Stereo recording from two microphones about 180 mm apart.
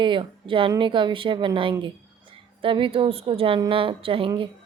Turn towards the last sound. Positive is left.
turn(degrees=-30)  # may be behind; listen again after turning